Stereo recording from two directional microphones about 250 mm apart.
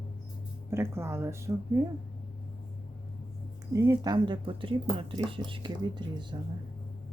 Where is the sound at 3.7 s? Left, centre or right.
Centre.